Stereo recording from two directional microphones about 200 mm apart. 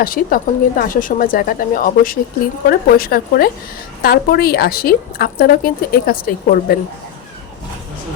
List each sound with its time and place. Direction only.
0.0 s a woman's voice: 45° left (ahead or behind)